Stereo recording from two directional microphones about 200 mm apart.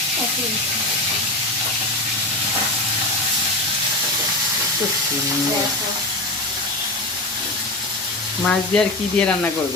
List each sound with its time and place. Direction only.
8.4 s speech: 5° left (ahead or behind)